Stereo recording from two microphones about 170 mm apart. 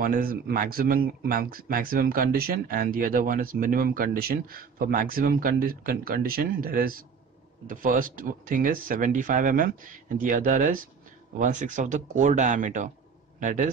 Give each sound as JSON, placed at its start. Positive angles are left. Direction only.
{"t": 0.0, "sound": "speech", "side_deg": -55}